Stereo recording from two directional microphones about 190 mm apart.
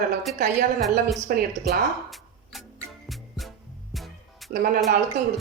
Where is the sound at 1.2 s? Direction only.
40° right (ahead or behind).